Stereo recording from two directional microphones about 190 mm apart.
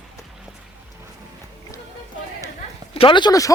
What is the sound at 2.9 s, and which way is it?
Speech, 25° left (ahead or behind).